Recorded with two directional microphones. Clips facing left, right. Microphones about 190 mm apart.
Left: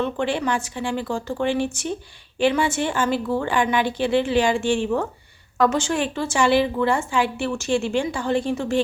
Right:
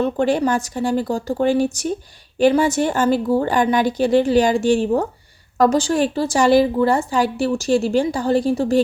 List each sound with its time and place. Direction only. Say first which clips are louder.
0.0 s a woman's voice: right 5 dB; 40° right (ahead or behind)